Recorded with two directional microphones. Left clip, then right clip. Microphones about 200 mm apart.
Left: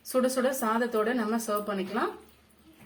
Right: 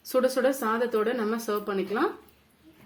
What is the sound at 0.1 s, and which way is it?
Speech, 40° right (ahead or behind).